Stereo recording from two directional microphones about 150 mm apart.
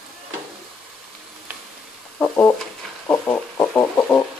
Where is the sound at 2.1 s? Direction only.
10° left (ahead or behind).